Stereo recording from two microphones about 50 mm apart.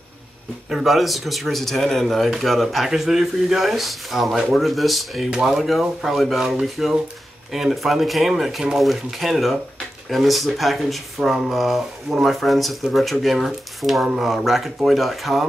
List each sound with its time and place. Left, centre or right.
0.7 s speech: centre